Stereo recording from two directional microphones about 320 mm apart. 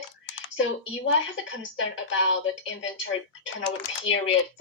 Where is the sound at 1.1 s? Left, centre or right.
Left.